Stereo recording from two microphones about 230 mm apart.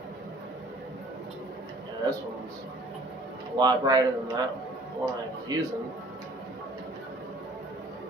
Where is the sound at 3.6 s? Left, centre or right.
Centre.